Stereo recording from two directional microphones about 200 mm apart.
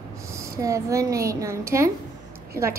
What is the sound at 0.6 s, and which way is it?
A woman's voice, 15° right (ahead or behind).